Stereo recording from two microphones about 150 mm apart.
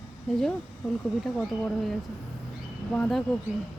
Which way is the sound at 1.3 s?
5° left (ahead or behind).